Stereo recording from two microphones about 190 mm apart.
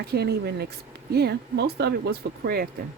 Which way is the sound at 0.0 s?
55° right (ahead or behind).